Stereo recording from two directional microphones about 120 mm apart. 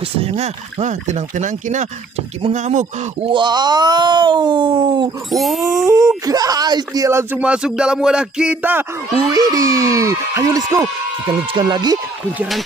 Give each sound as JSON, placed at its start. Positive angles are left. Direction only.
{"t": 0.2, "sound": "speech", "side_deg": -60}
{"t": 3.3, "sound": "speech", "side_deg": -40}
{"t": 5.3, "sound": "speech", "side_deg": 0}
{"t": 5.8, "sound": "speech", "side_deg": -30}
{"t": 7.4, "sound": "speech", "side_deg": -10}
{"t": 9.3, "sound": "speech", "side_deg": -30}